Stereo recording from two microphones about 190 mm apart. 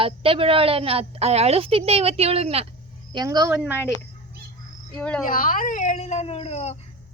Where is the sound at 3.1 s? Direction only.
20° right (ahead or behind).